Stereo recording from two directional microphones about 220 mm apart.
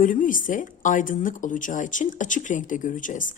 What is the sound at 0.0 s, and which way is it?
A woman's voice, 35° left (ahead or behind).